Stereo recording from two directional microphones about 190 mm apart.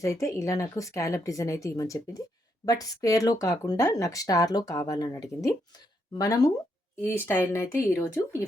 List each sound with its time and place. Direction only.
0.0 s speech: 15° left (ahead or behind)